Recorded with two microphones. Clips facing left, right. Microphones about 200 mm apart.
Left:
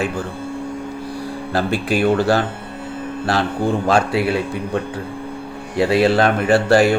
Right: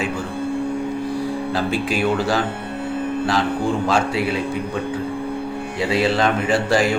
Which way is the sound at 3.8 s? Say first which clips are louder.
Left 3 dB; 55° left (ahead or behind).